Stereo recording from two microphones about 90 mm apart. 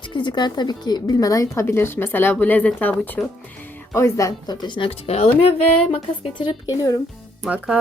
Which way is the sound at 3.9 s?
35° left (ahead or behind).